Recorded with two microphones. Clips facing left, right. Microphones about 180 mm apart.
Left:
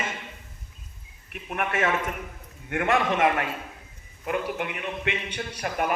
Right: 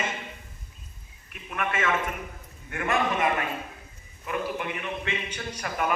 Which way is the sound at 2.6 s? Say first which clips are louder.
Left 3 dB; 70° left (ahead or behind).